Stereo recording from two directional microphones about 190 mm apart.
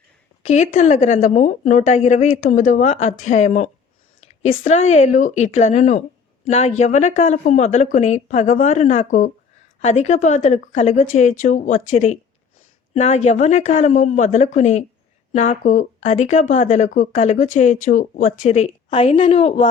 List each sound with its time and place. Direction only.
0.4 s speech: 40° left (ahead or behind)